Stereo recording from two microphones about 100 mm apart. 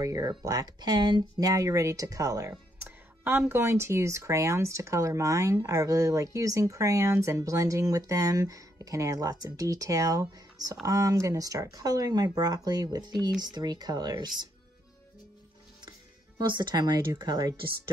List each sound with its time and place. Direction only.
0.0 s speech: 35° right (ahead or behind)
3.3 s speech: 20° right (ahead or behind); by 14.5 s 45° right (ahead or behind)
16.3 s speech: 50° right (ahead or behind)